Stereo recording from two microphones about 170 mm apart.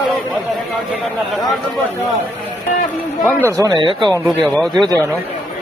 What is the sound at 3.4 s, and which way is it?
Speech, 20° right (ahead or behind).